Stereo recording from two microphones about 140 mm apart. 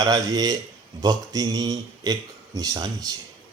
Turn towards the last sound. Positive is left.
turn(degrees=-30)  # may be behind; listen again after turning